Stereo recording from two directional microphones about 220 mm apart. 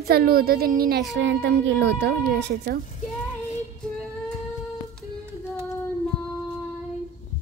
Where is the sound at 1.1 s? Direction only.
55° right (ahead or behind).